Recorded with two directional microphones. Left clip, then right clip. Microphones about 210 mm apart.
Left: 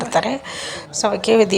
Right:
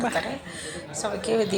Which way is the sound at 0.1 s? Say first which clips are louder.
Left 9 dB; 25° left (ahead or behind).